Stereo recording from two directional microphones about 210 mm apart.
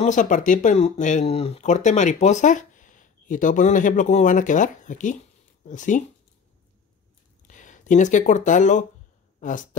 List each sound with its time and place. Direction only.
0.0 s speech: 40° left (ahead or behind)
7.4 s speech: 35° left (ahead or behind)